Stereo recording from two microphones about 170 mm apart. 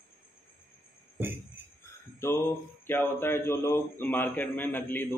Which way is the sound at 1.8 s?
15° left (ahead or behind).